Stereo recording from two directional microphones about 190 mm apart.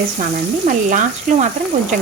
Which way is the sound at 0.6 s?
45° right (ahead or behind).